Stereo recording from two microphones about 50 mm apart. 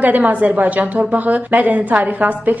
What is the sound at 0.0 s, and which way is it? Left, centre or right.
A woman's voice, right.